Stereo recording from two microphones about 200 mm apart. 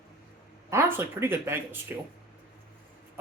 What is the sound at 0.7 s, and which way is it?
Speech, 10° right (ahead or behind).